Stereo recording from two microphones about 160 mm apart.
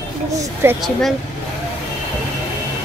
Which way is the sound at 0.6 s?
15° right (ahead or behind).